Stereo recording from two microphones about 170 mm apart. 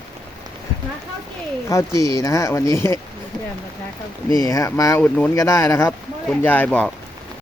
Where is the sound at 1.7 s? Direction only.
20° left (ahead or behind).